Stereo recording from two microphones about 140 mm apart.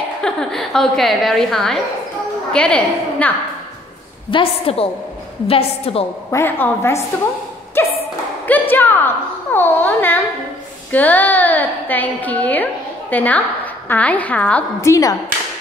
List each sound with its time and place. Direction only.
0.2 s a woman's voice: 5° left (ahead or behind)
4.3 s a woman's voice: 40° left (ahead or behind)
6.3 s a woman's voice: 15° left (ahead or behind)
7.8 s thump: 15° left (ahead or behind)
8.5 s a woman's voice: 15° left (ahead or behind)
14.8 s a woman's voice: 25° left (ahead or behind)